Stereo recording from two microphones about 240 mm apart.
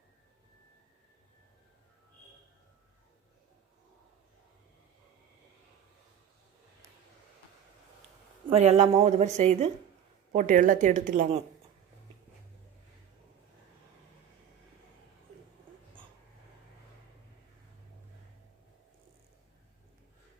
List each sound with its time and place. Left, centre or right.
8.4 s a woman's voice: right